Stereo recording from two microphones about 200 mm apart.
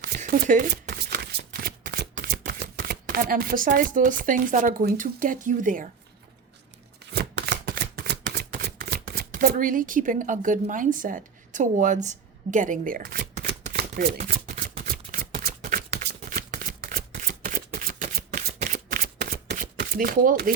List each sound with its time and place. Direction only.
0.0 s shuffling cards: 45° right (ahead or behind)
7.1 s shuffling cards: 55° right (ahead or behind)